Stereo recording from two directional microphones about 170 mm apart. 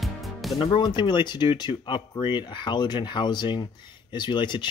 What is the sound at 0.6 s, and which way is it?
Speech, 30° left (ahead or behind).